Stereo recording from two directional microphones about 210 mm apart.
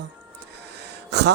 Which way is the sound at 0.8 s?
55° right (ahead or behind).